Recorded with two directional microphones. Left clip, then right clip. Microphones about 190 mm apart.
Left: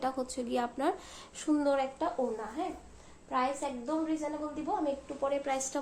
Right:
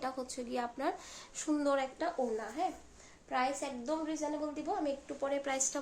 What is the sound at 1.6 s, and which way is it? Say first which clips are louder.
Speech: left 2 dB; 15° right (ahead or behind).